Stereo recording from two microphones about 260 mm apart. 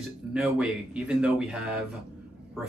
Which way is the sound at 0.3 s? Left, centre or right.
Centre.